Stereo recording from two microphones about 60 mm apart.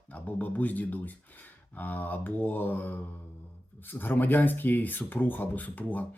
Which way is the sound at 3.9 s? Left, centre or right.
Left.